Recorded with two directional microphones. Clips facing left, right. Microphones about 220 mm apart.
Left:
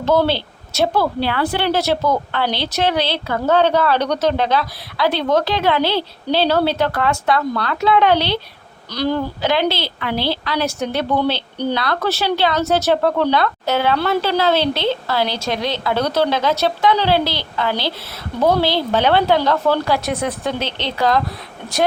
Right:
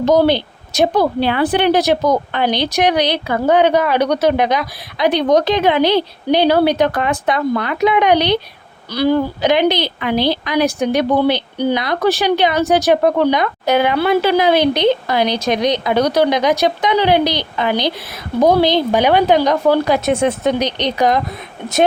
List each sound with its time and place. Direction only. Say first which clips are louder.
0.0 s a woman's voice: right 4 dB; 15° right (ahead or behind)